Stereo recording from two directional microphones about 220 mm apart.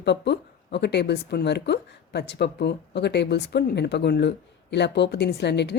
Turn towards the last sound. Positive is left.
turn(degrees=50)  # may be behind; listen again after turning